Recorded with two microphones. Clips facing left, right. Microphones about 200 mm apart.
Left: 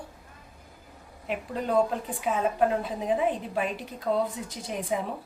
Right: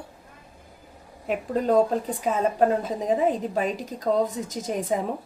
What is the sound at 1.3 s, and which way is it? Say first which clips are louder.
A woman's voice: right 6 dB; 40° right (ahead or behind).